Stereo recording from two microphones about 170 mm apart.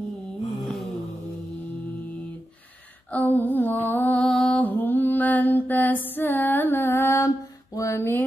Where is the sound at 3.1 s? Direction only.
10° left (ahead or behind).